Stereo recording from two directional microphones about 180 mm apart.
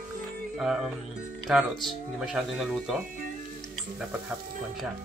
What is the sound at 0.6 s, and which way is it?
Speech, centre (ahead or behind).